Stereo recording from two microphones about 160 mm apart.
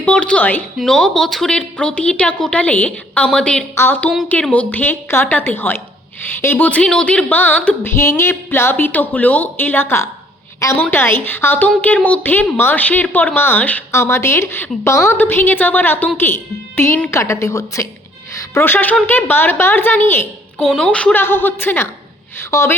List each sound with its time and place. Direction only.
0.0 s a woman's voice: 5° left (ahead or behind)
20.6 s a woman's voice: centre (ahead or behind)